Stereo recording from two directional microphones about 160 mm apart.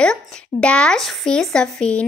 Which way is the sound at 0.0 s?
5° left (ahead or behind).